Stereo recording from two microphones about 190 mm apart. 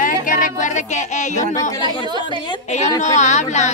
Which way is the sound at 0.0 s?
45° left (ahead or behind).